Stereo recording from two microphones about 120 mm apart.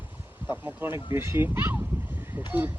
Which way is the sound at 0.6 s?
20° right (ahead or behind).